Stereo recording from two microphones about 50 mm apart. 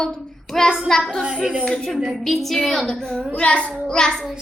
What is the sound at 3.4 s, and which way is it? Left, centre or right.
Child singing, left.